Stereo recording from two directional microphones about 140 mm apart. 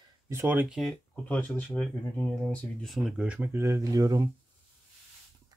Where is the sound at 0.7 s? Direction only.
Centre (ahead or behind); by 4.3 s 25° right (ahead or behind).